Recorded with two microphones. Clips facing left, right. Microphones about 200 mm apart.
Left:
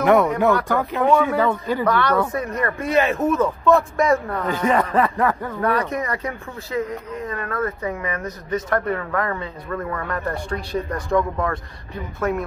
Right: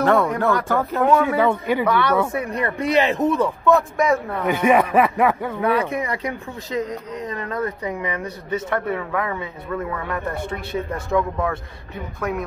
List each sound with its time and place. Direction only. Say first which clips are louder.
0.0 s speech: left 2 dB; 15° left (ahead or behind)
1.0 s speech: even; 5° right (ahead or behind)
3.7 s speech: left 1 dB; centre (ahead or behind)